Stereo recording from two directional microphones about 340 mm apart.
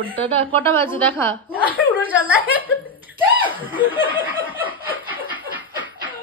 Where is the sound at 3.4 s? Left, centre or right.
Centre.